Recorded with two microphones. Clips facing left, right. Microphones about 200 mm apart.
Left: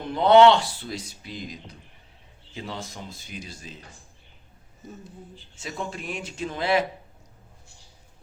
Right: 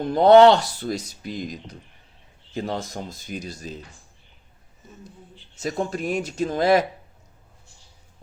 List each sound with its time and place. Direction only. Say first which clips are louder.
0.0 s speech: right 3 dB; 40° right (ahead or behind)
5.5 s speech: right 8 dB; 40° right (ahead or behind)